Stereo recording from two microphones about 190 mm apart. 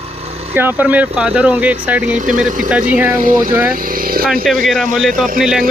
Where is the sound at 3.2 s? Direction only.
45° right (ahead or behind).